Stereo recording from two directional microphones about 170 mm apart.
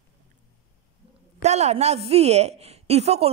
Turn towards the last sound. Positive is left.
turn(degrees=-40)  # may be behind; listen again after turning